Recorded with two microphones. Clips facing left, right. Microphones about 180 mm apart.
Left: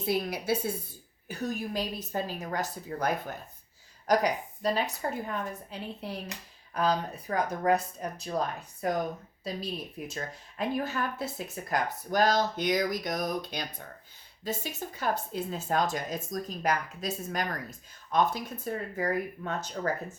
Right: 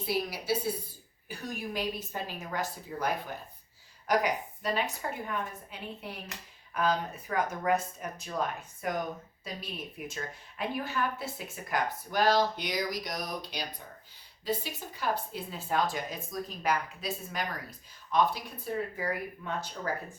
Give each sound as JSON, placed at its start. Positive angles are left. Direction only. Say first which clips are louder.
{"t": 0.0, "sound": "speech", "louder": "left 3 dB", "side_deg": 55}
{"t": 1.3, "sound": "speech", "louder": "left 4 dB", "side_deg": 40}